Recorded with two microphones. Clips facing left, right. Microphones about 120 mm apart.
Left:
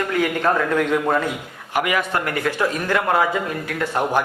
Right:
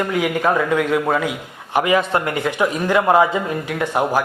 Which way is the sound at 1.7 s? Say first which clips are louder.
Right 4 dB; 25° right (ahead or behind).